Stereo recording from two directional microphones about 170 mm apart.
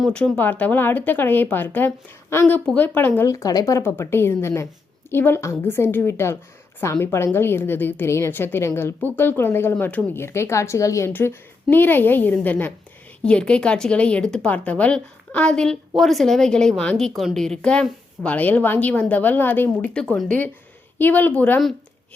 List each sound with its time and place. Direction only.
0.0 s a woman's voice: 5° left (ahead or behind)